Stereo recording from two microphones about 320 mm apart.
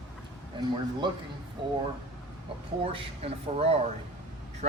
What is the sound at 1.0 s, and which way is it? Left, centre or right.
Speech, centre.